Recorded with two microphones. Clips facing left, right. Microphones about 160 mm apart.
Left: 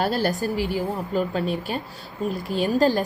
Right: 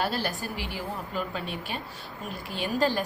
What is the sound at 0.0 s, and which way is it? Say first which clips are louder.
A woman's voice: left 7 dB; 40° left (ahead or behind).